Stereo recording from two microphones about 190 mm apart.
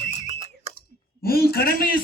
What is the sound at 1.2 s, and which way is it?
Speech, 55° left (ahead or behind).